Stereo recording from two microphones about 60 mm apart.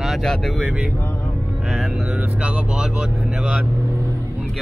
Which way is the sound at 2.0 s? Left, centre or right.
Centre.